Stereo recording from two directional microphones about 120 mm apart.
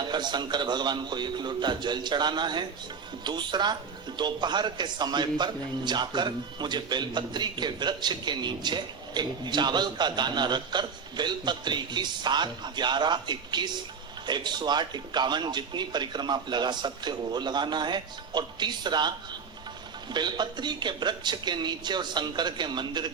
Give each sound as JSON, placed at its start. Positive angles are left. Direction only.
{"t": 0.0, "sound": "speech", "side_deg": -40}
{"t": 20.1, "sound": "speech", "side_deg": -40}